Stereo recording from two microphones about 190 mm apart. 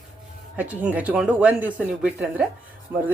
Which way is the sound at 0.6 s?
5° right (ahead or behind).